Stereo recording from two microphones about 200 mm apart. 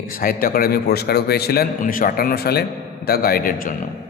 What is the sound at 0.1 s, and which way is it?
A man's voice, 45° left (ahead or behind).